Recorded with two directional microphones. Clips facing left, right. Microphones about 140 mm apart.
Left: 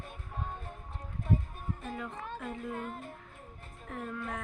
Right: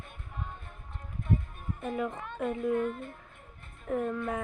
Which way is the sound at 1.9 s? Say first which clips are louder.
Right 8 dB; 10° right (ahead or behind).